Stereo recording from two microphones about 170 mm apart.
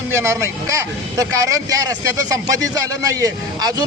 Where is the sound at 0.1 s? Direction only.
15° right (ahead or behind).